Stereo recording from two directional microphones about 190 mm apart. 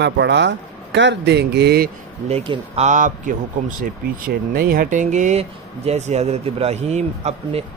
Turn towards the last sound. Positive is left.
turn(degrees=-35)  # may be behind; listen again after turning